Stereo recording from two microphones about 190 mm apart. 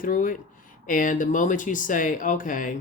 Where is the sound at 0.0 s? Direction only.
45° left (ahead or behind).